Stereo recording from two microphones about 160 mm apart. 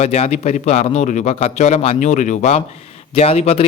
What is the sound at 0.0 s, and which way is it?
A man's voice, 40° left (ahead or behind).